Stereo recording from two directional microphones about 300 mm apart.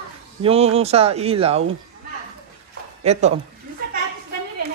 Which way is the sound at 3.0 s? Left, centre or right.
Right.